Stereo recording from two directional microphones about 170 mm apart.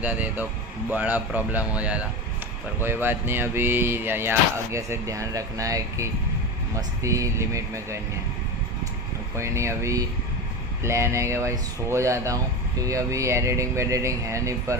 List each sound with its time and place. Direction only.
0.0 s speech: 10° right (ahead or behind)
9.4 s speech: 15° right (ahead or behind)